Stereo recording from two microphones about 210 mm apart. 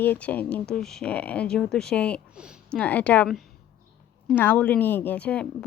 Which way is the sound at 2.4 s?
5° right (ahead or behind).